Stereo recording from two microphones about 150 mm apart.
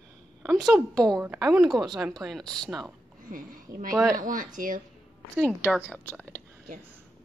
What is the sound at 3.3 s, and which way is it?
A woman's voice, 65° right (ahead or behind).